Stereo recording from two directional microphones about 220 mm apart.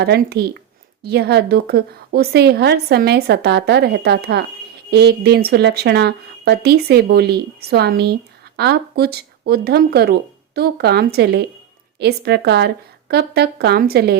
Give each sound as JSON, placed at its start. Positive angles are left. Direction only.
{"t": 0.0, "sound": "a woman's voice", "side_deg": -45}